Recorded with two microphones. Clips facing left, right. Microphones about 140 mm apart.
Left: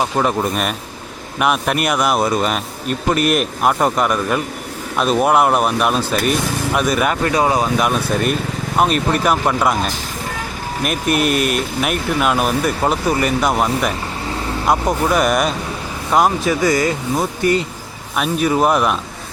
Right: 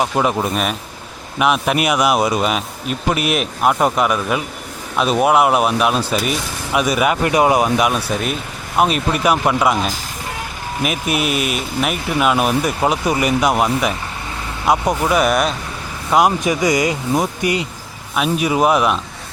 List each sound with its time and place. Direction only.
0.0 s a man's voice: 5° right (ahead or behind)
7.3 s speech: 20° right (ahead or behind)
7.8 s a man's voice: 5° right (ahead or behind)
16.1 s a man's voice: 15° right (ahead or behind)